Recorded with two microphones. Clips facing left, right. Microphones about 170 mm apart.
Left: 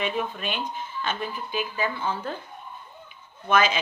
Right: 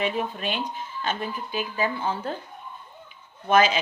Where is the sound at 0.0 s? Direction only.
40° right (ahead or behind).